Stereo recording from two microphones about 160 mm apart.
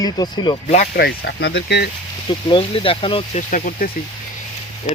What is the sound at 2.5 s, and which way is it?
Speech, 35° left (ahead or behind).